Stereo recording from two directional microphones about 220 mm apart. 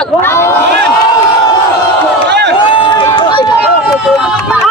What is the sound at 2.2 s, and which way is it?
Run, 50° right (ahead or behind).